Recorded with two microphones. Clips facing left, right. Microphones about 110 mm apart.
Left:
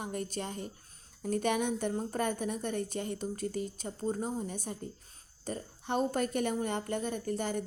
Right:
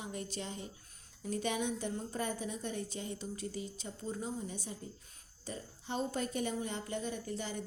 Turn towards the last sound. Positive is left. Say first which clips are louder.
# left 6 dB
turn(degrees=55)  # may be behind; listen again after turning